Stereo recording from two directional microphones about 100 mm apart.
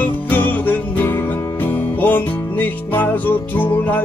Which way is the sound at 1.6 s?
20° left (ahead or behind).